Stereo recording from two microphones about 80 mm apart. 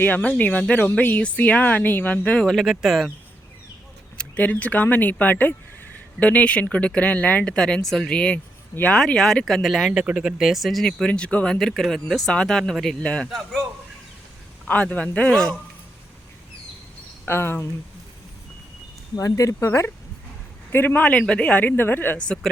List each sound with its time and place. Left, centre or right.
0.0 s speech: centre
2.4 s speech: centre
4.2 s speech: centre
9.0 s speech: centre
9.9 s speech: centre
11.0 s speech: centre
11.5 s speech: centre
17.2 s speech: left
19.1 s speech: left
19.5 s speech: left